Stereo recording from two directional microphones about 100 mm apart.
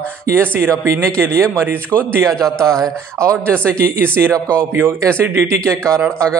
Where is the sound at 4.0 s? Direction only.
25° right (ahead or behind).